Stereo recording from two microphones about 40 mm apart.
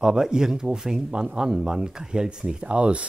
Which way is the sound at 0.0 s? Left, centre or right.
Centre.